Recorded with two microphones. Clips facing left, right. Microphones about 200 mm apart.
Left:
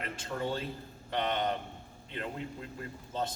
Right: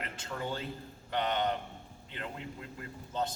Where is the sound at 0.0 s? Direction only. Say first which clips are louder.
Left 3 dB; 30° left (ahead or behind).